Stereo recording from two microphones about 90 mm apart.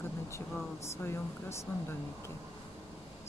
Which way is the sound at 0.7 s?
30° left (ahead or behind).